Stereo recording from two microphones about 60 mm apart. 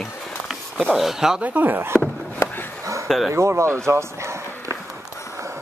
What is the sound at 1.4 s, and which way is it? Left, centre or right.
Speech, right.